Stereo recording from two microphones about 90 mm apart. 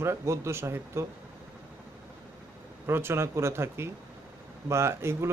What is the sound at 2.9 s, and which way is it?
Speech, 25° right (ahead or behind).